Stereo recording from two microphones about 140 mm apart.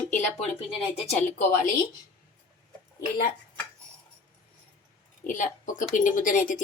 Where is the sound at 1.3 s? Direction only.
85° left.